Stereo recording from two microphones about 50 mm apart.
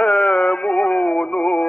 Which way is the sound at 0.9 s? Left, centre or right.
Left.